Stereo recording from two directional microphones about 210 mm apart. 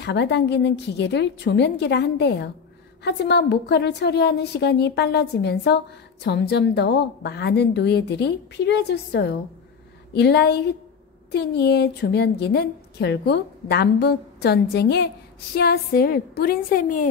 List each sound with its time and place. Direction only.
0.0 s a woman's voice: 55° left (ahead or behind)